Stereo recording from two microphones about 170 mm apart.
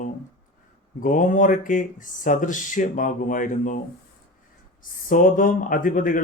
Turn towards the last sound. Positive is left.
turn(degrees=55)  # may be behind; listen again after turning